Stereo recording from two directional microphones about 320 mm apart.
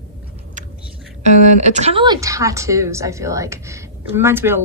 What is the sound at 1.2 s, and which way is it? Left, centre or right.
Speech, right.